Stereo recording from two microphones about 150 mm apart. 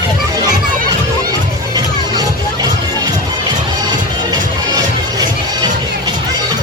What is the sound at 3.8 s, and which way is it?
Music, 25° right (ahead or behind).